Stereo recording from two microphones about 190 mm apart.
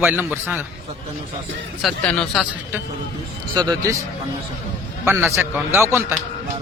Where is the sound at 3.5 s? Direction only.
20° right (ahead or behind).